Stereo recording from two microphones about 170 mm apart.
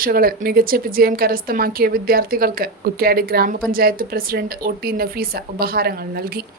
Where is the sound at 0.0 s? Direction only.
60° right (ahead or behind).